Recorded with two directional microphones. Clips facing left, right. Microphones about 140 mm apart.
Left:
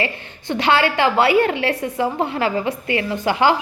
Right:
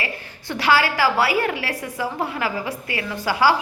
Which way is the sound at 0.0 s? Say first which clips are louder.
Left 6 dB; 25° left (ahead or behind).